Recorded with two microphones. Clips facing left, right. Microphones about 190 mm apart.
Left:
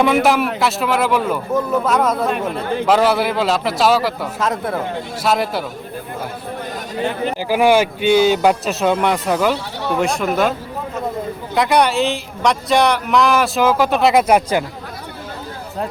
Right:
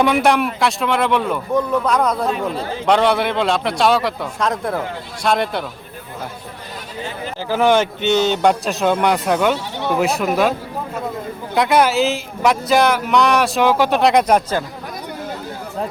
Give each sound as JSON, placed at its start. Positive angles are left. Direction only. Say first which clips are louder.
{"t": 0.0, "sound": "speech", "louder": "left 1 dB", "side_deg": 0}
{"t": 2.3, "sound": "speech", "louder": "left 2 dB", "side_deg": 60}
{"t": 2.8, "sound": "speech", "louder": "even", "side_deg": 5}
{"t": 7.0, "sound": "speech", "louder": "left 8 dB", "side_deg": 60}
{"t": 7.4, "sound": "speech", "louder": "left 1 dB", "side_deg": 10}
{"t": 11.5, "sound": "speech", "louder": "even", "side_deg": 0}